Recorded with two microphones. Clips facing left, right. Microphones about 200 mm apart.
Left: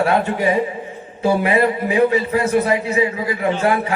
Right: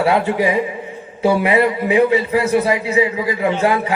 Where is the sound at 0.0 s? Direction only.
15° right (ahead or behind).